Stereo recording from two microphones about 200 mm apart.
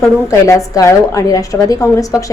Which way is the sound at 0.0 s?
15° left (ahead or behind).